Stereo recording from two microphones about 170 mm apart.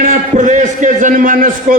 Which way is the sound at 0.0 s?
50° right (ahead or behind).